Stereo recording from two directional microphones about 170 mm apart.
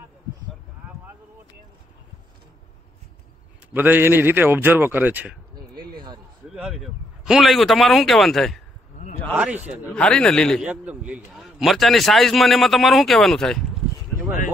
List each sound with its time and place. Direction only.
3.7 s a man's voice: 10° right (ahead or behind)
5.8 s a sound: 65° right (ahead or behind)
6.5 s a man's voice: 5° right (ahead or behind)
9.3 s a man's voice: 10° right (ahead or behind)
9.8 s a man's voice: 5° left (ahead or behind)
10.6 s a man's voice: 5° right (ahead or behind)